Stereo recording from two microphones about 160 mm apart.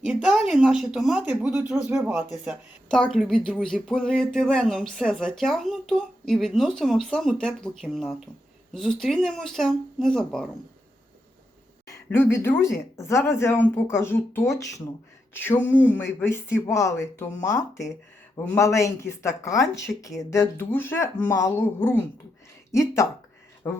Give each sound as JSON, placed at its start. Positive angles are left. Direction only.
{"t": 0.0, "sound": "speech", "side_deg": -5}
{"t": 2.9, "sound": "speech", "side_deg": 0}
{"t": 11.9, "sound": "speech", "side_deg": 15}